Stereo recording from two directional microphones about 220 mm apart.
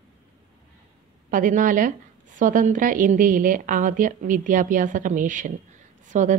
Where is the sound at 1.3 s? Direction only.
35° right (ahead or behind).